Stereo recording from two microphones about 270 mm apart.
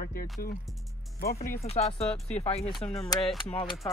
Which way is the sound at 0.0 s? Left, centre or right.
Left.